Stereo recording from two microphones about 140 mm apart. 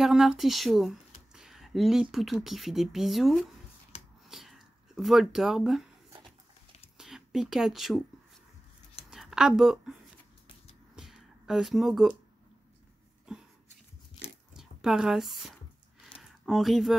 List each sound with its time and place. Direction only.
0.0 s speech: 5° right (ahead or behind)
3.9 s finger snapping: 50° left (ahead or behind)
4.3 s speech: centre (ahead or behind)
7.0 s speech: 5° right (ahead or behind)
9.1 s a woman's voice: 5° right (ahead or behind)
11.0 s a sound: centre (ahead or behind)
13.3 s a sound: 5° right (ahead or behind)
14.6 s speech: 5° right (ahead or behind)
16.2 s a sound: centre (ahead or behind)